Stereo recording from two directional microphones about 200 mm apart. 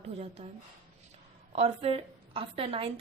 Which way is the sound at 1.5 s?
30° right (ahead or behind).